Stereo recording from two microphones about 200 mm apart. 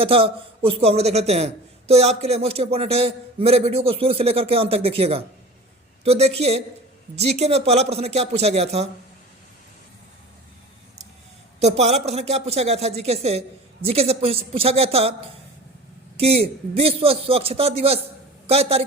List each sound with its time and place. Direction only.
0.0 s a man's voice: 30° right (ahead or behind)
11.6 s a man's voice: 35° right (ahead or behind)
16.1 s a man's voice: 30° right (ahead or behind)